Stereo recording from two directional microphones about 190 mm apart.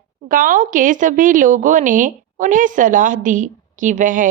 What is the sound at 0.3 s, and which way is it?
A woman's voice, 45° right (ahead or behind).